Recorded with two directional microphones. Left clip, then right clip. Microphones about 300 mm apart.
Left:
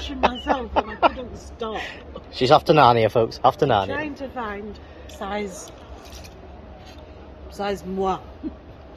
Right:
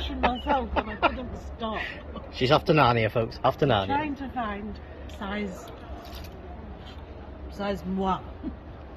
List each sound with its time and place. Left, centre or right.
0.0 s speech: centre
7.5 s speech: centre